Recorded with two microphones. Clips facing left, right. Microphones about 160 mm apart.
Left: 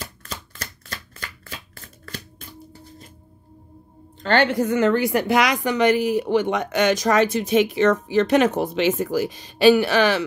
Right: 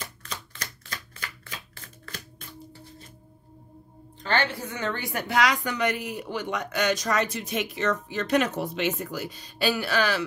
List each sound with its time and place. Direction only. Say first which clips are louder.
0.2 s shuffling cards: left 3 dB; 45° left (ahead or behind)
4.3 s a woman's voice: left 9 dB; 75° left (ahead or behind)